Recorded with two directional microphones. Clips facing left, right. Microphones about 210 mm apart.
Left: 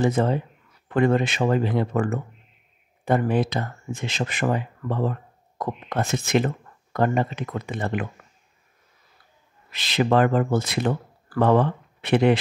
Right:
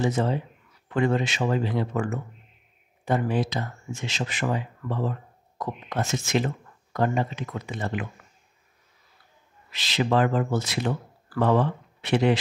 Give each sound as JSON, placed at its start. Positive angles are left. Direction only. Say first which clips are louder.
{"t": 0.0, "sound": "speech", "louder": "left 3 dB", "side_deg": 55}
{"t": 9.7, "sound": "speech", "louder": "left 3 dB", "side_deg": 55}